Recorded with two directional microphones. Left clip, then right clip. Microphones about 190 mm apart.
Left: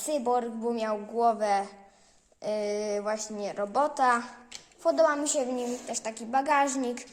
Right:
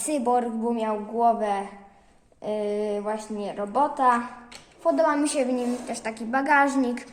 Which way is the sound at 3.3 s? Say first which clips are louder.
Right 4 dB; 35° left (ahead or behind).